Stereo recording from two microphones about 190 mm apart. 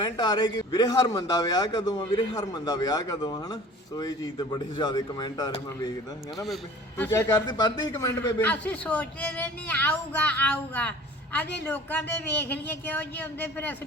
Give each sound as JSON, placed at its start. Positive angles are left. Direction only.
{"t": 0.0, "sound": "a man's voice", "side_deg": 20}
{"t": 6.9, "sound": "a man's voice", "side_deg": 15}